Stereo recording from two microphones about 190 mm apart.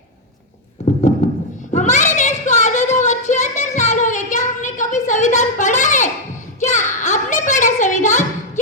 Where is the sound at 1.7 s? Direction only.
40° left (ahead or behind).